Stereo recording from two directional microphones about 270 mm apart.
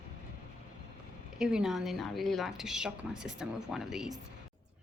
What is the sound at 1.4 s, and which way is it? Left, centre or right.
A woman's voice, centre.